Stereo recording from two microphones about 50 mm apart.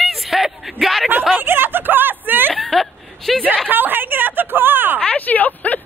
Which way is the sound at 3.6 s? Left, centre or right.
Right.